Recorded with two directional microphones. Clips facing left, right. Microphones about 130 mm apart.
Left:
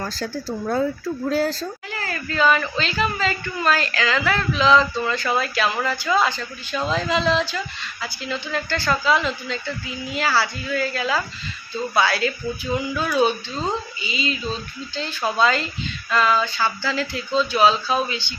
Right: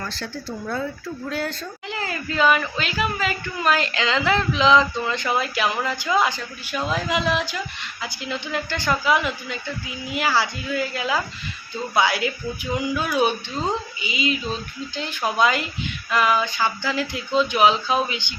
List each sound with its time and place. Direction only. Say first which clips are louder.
0.0 s speech: left 4 dB; 40° left (ahead or behind)
1.9 s speech: right 1 dB; 20° right (ahead or behind)